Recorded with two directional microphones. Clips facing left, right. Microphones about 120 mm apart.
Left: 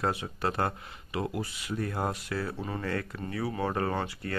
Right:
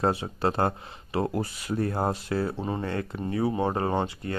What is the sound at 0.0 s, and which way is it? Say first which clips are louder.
Speech: right 5 dB; 30° right (ahead or behind).